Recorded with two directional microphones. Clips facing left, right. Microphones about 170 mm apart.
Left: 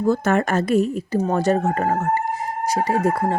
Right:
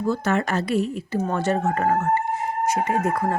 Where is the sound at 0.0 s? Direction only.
50° left (ahead or behind).